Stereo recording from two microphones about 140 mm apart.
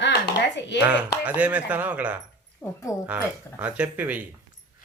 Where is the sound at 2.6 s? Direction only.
20° left (ahead or behind).